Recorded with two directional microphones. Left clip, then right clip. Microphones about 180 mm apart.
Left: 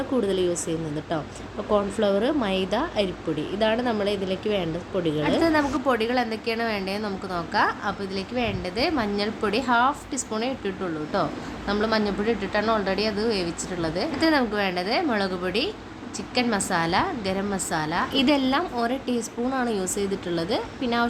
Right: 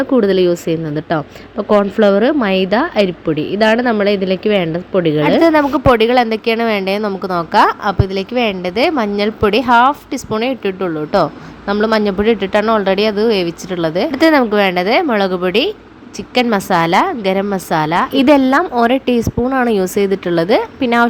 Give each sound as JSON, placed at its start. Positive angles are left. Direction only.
{"t": 0.1, "sound": "a woman's voice", "side_deg": -35}